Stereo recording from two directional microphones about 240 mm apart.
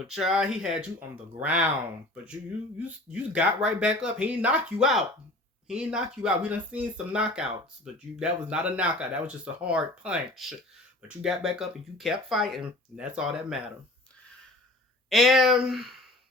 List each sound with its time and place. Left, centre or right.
0.1 s speech: centre
2.8 s speech: centre
15.1 s speech: centre